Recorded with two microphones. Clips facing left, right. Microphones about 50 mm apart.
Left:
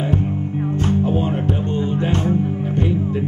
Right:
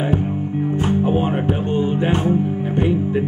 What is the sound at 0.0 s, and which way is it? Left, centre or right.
Music, centre.